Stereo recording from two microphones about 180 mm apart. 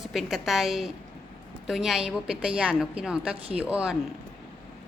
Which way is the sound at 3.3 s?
30° right (ahead or behind).